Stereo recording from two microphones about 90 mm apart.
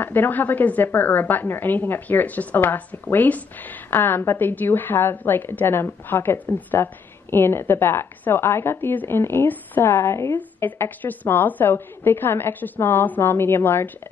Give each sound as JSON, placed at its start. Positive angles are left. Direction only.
{"t": 0.0, "sound": "a woman's voice", "side_deg": 20}